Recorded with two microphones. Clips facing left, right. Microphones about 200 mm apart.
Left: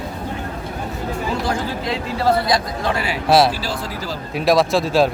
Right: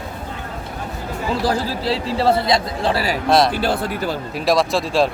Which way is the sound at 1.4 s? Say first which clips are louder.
Right 3 dB; 35° right (ahead or behind).